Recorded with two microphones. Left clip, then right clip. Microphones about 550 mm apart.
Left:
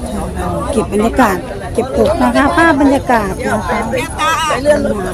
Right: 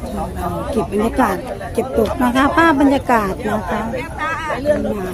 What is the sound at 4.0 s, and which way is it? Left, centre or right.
Speech, centre.